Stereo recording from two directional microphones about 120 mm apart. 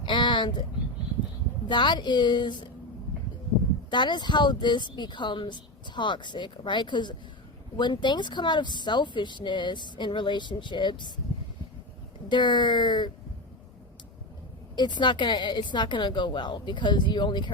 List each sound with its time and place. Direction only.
0.0 s a sound: 40° left (ahead or behind)
1.6 s speech: 40° left (ahead or behind)
3.8 s speech: 40° left (ahead or behind)
12.3 s speech: 40° left (ahead or behind)
14.8 s speech: 40° left (ahead or behind)